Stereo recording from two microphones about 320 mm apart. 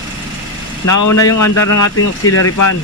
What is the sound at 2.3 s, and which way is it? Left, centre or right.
Speech, left.